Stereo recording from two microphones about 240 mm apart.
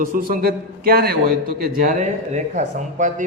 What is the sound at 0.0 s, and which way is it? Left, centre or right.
A man's voice, right.